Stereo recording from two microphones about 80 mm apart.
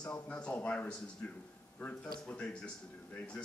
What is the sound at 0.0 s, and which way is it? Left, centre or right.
A man's voice, centre.